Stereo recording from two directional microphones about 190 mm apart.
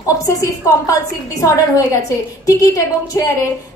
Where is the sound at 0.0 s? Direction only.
15° left (ahead or behind).